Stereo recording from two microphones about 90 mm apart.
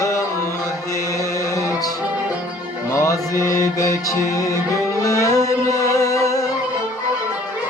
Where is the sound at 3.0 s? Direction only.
35° left (ahead or behind).